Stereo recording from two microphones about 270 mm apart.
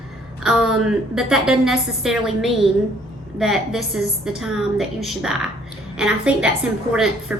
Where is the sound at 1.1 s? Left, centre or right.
Centre.